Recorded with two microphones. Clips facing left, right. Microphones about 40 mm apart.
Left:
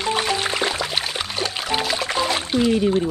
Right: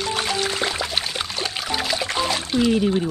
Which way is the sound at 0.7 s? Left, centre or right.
Centre.